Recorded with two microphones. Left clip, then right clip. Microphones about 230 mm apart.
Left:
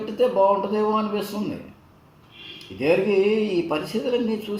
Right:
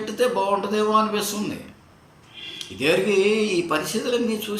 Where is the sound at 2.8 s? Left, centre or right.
Right.